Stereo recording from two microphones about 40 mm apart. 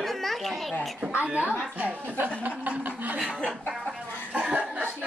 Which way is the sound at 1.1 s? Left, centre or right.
Right.